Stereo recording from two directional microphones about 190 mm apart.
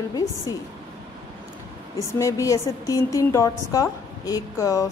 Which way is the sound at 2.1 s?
15° left (ahead or behind).